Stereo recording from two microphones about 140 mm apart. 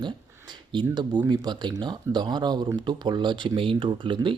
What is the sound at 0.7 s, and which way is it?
Speech, 30° right (ahead or behind).